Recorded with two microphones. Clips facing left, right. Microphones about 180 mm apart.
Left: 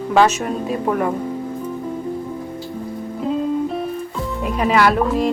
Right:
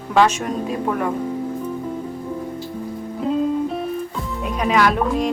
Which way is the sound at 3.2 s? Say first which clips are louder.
Even; centre (ahead or behind).